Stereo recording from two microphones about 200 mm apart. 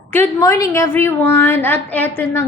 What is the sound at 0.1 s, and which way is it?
A woman's voice, 15° left (ahead or behind).